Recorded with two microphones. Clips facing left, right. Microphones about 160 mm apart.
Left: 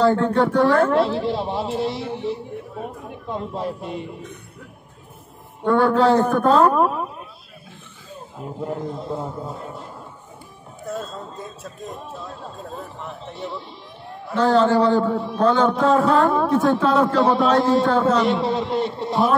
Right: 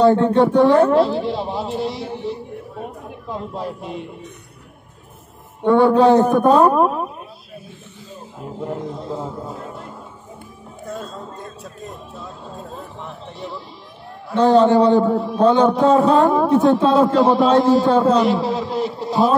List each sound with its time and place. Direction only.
0.0 s speech: 20° right (ahead or behind)
0.9 s a man's voice: centre (ahead or behind)
5.6 s speech: 20° right (ahead or behind)
8.4 s a man's voice: centre (ahead or behind)
10.9 s a man's voice: centre (ahead or behind)
14.3 s speech: 20° right (ahead or behind)
15.0 s a man's voice: centre (ahead or behind)
15.3 s speech: 20° right (ahead or behind)
17.2 s a man's voice: centre (ahead or behind)
17.8 s speech: 20° right (ahead or behind)
18.1 s a man's voice: centre (ahead or behind)